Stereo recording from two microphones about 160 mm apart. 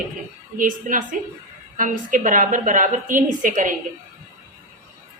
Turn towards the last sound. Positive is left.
turn(degrees=-55)  # may be behind; listen again after turning